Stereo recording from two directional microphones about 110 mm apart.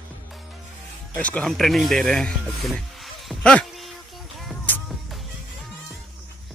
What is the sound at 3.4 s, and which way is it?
Speech, 10° left (ahead or behind).